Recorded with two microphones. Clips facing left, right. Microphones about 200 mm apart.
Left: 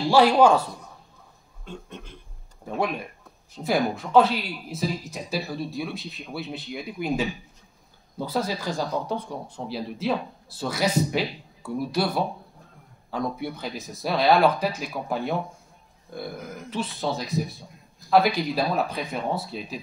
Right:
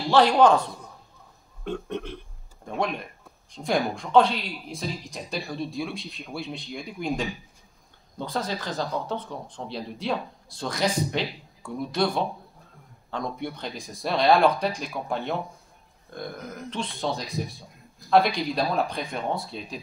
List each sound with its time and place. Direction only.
0.1 s speech: 10° left (ahead or behind)
1.6 s speech: 65° right (ahead or behind)
2.7 s speech: 5° left (ahead or behind)